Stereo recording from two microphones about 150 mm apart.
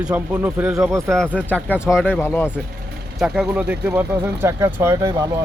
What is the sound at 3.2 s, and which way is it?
A man's voice, 5° right (ahead or behind).